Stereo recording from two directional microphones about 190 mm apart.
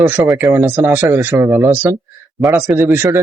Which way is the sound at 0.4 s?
10° right (ahead or behind).